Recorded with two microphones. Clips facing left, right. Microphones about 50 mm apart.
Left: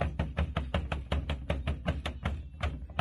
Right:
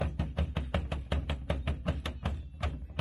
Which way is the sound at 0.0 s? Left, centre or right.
Left.